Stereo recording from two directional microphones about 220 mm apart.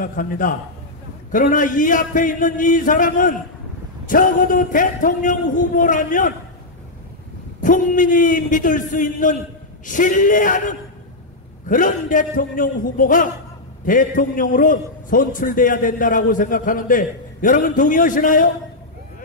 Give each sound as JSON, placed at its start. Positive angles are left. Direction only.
{"t": 0.0, "sound": "a man's voice", "side_deg": 40}
{"t": 7.6, "sound": "a man's voice", "side_deg": 35}